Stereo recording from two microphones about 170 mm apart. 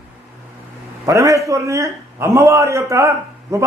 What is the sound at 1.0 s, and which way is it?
A man's voice, 20° right (ahead or behind).